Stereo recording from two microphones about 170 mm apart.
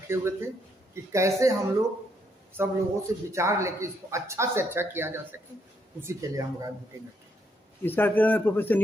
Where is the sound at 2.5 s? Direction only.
15° right (ahead or behind).